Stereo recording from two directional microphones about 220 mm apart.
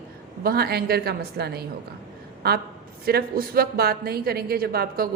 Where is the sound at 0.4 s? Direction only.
45° right (ahead or behind).